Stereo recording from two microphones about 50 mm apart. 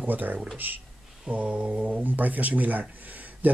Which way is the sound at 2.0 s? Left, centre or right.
Right.